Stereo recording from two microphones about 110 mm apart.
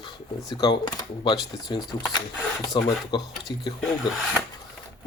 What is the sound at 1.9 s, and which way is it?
Speech, 40° left (ahead or behind).